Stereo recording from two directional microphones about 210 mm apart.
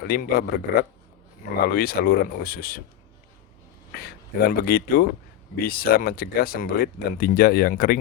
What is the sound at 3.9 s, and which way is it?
Speech, 45° left (ahead or behind).